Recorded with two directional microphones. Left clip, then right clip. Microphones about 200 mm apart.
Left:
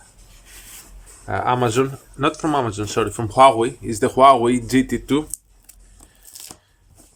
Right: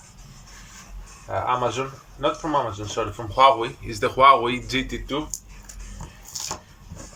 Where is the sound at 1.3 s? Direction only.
45° left (ahead or behind).